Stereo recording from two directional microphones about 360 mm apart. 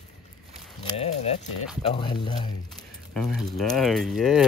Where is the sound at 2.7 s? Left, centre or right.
Centre.